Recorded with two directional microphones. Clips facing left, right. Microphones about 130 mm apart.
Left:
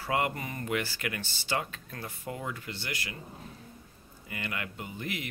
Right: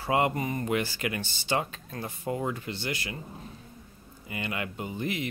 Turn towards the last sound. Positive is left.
turn(degrees=-25)  # may be behind; listen again after turning